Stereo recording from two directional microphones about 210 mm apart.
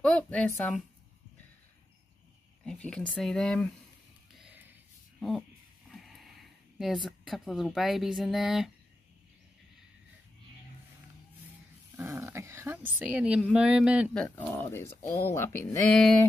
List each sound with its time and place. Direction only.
0.0 s a woman's voice: 5° left (ahead or behind)
2.6 s a woman's voice: 5° left (ahead or behind)
4.4 s a sound: 10° right (ahead or behind)
5.9 s vehicle: centre (ahead or behind)
6.8 s a woman's voice: centre (ahead or behind)
12.0 s speech: 10° right (ahead or behind)
14.2 s speech: 10° left (ahead or behind)